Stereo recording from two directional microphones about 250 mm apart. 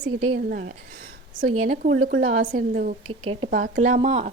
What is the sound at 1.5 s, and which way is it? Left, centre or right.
A woman's voice, right.